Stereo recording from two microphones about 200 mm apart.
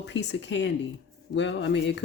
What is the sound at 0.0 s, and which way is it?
Speech, 60° left (ahead or behind).